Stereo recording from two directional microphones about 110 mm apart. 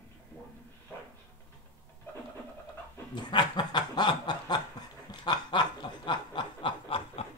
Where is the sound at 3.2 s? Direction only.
40° left (ahead or behind).